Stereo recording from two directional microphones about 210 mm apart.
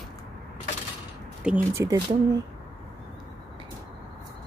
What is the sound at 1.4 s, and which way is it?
Speech, 10° right (ahead or behind).